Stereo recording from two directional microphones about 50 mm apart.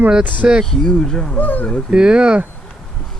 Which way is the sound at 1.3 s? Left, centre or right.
Left.